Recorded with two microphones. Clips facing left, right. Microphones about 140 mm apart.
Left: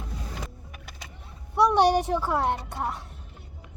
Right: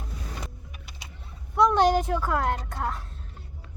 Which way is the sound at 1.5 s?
15° left (ahead or behind).